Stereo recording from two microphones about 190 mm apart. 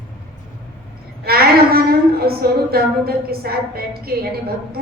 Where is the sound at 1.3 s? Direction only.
55° right (ahead or behind).